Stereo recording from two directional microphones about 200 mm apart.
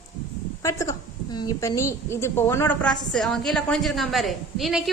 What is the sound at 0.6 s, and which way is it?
A woman's voice, 15° left (ahead or behind).